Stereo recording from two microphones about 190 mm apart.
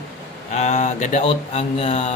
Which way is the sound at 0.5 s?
35° left (ahead or behind).